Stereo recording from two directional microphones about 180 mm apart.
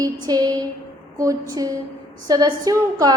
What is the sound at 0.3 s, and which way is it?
Speech, 20° right (ahead or behind).